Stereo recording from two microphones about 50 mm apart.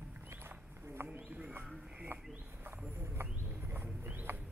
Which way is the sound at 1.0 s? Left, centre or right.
Right.